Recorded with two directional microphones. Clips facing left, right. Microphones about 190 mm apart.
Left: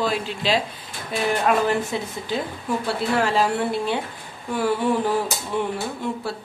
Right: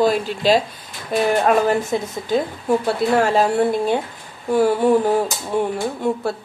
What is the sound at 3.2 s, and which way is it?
Speech, 45° right (ahead or behind).